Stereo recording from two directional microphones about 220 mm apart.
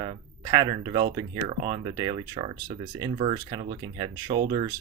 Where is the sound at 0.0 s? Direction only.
20° right (ahead or behind).